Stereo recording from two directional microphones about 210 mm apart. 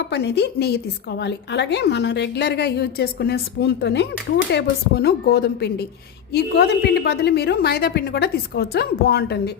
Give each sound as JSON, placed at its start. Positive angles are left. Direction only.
{"t": 0.1, "sound": "a woman's voice", "side_deg": 50}